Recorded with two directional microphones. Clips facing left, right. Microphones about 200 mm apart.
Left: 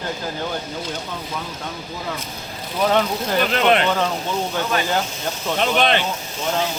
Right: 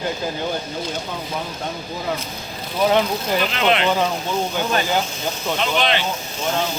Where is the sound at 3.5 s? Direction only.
45° left (ahead or behind).